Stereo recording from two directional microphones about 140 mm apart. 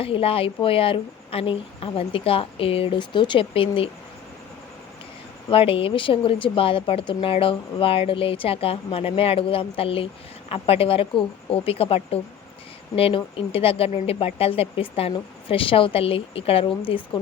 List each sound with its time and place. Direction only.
0.0 s a woman's voice: 40° left (ahead or behind)
5.5 s a woman's voice: 40° left (ahead or behind)